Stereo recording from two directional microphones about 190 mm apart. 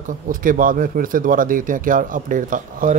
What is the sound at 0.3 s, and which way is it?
A man's voice, 45° right (ahead or behind).